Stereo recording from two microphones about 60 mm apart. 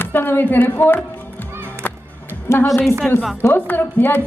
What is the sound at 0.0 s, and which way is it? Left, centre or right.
A woman's voice, left.